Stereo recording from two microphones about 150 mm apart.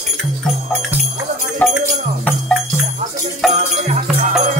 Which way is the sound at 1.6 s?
10° left (ahead or behind).